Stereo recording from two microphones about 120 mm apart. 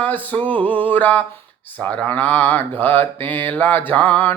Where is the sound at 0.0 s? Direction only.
15° left (ahead or behind).